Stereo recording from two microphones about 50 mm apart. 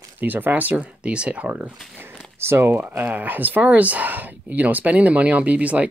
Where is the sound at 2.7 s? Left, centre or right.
Right.